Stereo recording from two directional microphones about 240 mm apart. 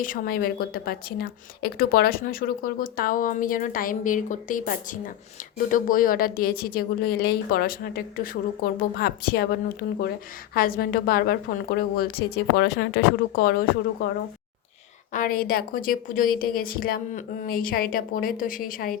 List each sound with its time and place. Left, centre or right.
0.0 s speech: left